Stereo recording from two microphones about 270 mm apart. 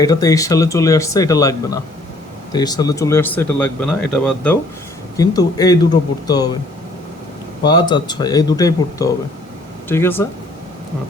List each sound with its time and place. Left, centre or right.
0.0 s speech: centre
7.6 s speech: centre